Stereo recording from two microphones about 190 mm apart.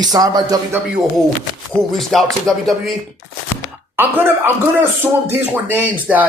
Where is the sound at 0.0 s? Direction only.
20° right (ahead or behind).